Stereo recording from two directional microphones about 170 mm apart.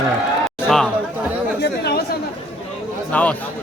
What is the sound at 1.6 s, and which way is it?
Chatter, 75° left (ahead or behind).